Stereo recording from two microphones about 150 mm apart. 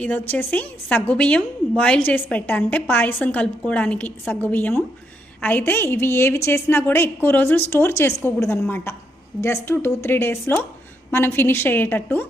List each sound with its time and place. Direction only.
0.0 s a woman's voice: 10° left (ahead or behind)